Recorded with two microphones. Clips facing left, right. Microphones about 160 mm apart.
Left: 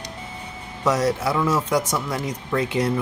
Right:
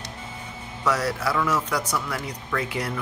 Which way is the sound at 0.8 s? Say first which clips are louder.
Left 4 dB; 25° left (ahead or behind).